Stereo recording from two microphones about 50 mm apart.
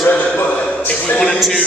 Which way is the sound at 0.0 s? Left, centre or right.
Left.